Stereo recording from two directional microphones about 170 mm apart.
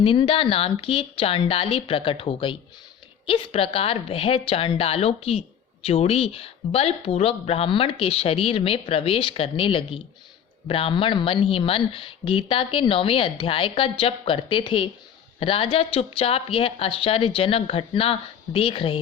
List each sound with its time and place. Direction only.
0.0 s speech: 30° left (ahead or behind)